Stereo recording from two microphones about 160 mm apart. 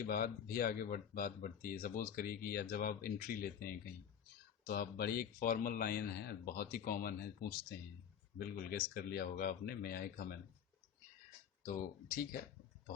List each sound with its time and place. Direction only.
0.1 s speech: 65° left (ahead or behind)
11.6 s speech: 55° left (ahead or behind)